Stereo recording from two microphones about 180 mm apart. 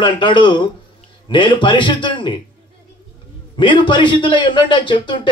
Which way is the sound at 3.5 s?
25° left (ahead or behind).